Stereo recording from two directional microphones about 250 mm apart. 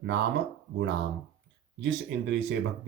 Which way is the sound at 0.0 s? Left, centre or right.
Right.